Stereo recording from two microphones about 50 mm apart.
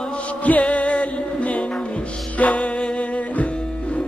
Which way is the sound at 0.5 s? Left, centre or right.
Left.